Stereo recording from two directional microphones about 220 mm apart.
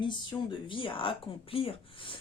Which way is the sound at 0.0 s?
20° left (ahead or behind).